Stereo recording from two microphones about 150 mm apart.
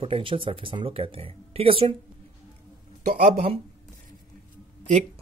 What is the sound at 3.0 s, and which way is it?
Speech, 50° right (ahead or behind).